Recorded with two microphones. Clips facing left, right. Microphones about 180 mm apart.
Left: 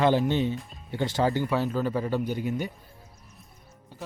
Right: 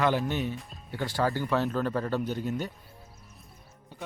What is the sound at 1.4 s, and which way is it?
Speech, 5° left (ahead or behind).